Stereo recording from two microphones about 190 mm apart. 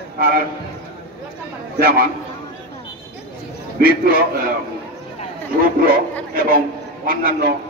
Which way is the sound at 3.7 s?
50° right (ahead or behind).